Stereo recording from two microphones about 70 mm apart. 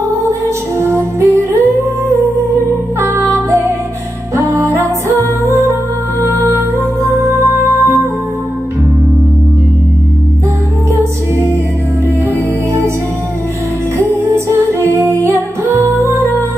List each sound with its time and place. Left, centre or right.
0.7 s music: right
13.9 s music: right